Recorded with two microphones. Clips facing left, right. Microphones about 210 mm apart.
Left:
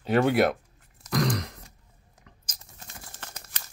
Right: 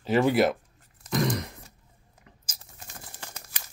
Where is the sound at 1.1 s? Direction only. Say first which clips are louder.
Even; 5° right (ahead or behind).